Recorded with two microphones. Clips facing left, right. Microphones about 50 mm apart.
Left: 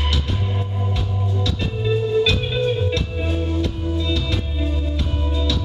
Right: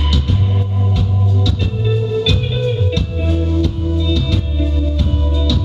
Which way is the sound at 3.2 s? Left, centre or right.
Centre.